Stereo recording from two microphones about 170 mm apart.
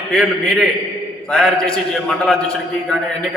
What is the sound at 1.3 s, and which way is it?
A man's voice, 5° left (ahead or behind).